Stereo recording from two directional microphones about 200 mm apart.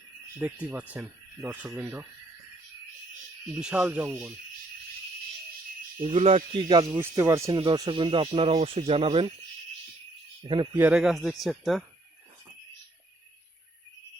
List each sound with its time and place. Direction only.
0.3 s speech: 5° right (ahead or behind)
3.6 s speech: 5° right (ahead or behind)
6.0 s speech: 30° right (ahead or behind); by 7.6 s 15° right (ahead or behind)
7.6 s speech: 25° right (ahead or behind)
10.8 s speech: 5° right (ahead or behind)